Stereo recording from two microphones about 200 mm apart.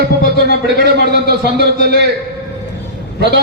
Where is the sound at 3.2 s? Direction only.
55° right (ahead or behind).